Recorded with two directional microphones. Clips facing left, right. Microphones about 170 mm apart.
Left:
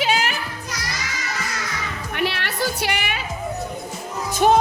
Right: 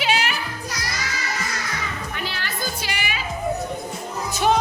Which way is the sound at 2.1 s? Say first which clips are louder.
Left 6 dB; 65° left (ahead or behind).